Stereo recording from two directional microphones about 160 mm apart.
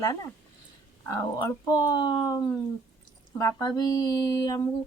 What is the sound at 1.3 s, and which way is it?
Speech, 25° left (ahead or behind).